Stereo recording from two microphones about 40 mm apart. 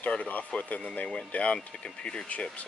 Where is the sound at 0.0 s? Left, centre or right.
Left.